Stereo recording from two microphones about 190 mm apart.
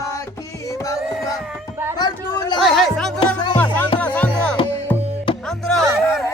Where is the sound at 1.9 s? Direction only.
20° left (ahead or behind).